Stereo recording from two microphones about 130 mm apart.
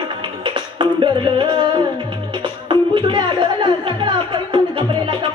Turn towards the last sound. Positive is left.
turn(degrees=-35)  # may be behind; listen again after turning